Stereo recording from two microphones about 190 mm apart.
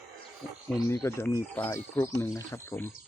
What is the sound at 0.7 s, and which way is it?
Speech, 15° left (ahead or behind).